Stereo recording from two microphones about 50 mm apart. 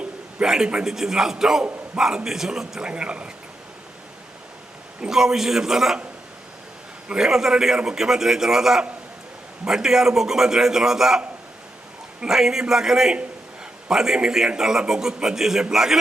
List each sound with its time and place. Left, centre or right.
0.0 s a man's voice: centre
2.9 s speech: right
4.9 s a man's voice: centre
7.2 s a man's voice: centre